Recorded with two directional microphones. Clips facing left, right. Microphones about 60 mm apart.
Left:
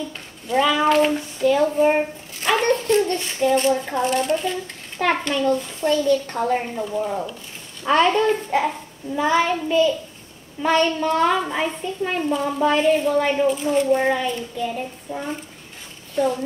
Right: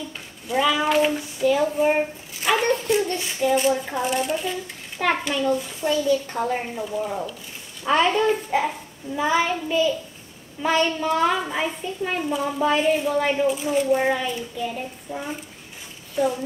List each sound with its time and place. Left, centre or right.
0.5 s a child's voice: centre
2.4 s a sound: centre
3.4 s a child's voice: centre
6.4 s a woman's voice: centre
6.8 s speech: left
7.8 s a child's voice: centre